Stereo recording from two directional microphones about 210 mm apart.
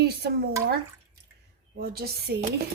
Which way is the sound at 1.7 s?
45° right (ahead or behind).